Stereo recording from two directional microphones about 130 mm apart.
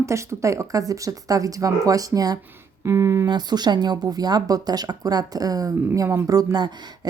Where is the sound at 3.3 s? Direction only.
35° right (ahead or behind).